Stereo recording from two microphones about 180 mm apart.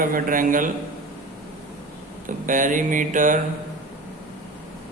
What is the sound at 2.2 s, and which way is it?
Speech, 45° right (ahead or behind).